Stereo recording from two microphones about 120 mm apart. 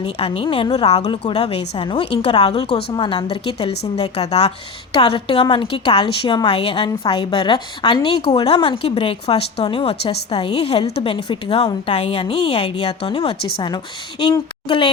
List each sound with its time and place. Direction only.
0.0 s a woman's voice: 45° left (ahead or behind)
0.9 s speech: 60° left (ahead or behind)
1.1 s a woman's voice: 45° left (ahead or behind)
2.9 s a woman's voice: 40° left (ahead or behind); by 4.5 s 60° left (ahead or behind)
4.9 s a woman's voice: 50° left (ahead or behind)
10.2 s a woman's voice: 45° left (ahead or behind)